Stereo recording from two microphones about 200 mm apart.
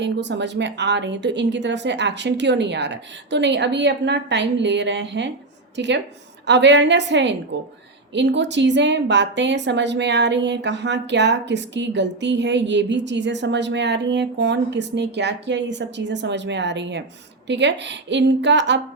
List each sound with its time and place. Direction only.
0.0 s a woman's voice: 60° right (ahead or behind)